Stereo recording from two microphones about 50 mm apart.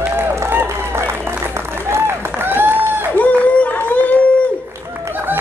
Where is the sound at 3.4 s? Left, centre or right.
Left.